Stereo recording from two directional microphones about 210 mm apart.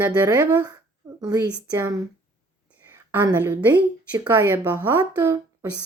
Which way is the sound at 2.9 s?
10° right (ahead or behind).